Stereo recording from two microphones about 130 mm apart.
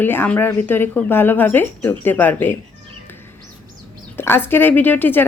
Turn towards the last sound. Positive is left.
turn(degrees=15)  # may be behind; listen again after turning